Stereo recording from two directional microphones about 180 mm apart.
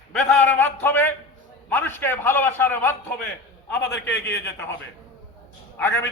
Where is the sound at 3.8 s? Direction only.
75° left (ahead or behind).